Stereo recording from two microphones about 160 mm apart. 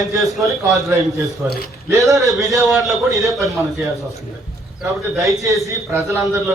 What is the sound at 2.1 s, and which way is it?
A man's voice, centre (ahead or behind).